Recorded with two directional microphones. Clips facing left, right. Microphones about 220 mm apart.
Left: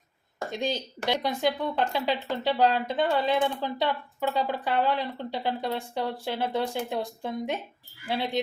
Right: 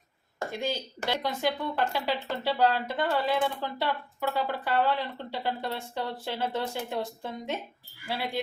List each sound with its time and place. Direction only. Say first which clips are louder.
0.5 s speech: left 3 dB; 15° left (ahead or behind)